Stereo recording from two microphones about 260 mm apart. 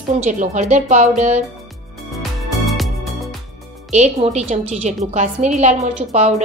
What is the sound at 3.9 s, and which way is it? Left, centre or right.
A woman's voice, right.